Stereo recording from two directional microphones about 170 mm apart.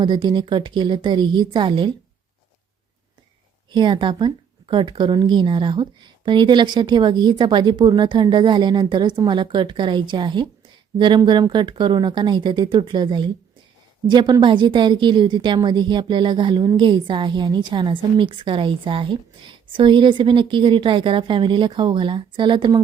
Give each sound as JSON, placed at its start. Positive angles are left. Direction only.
{"t": 0.0, "sound": "a woman's voice", "side_deg": -30}
{"t": 3.8, "sound": "a woman's voice", "side_deg": -30}